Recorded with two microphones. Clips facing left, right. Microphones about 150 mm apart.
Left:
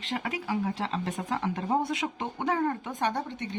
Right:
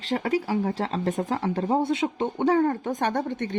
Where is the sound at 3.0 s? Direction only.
50° right (ahead or behind).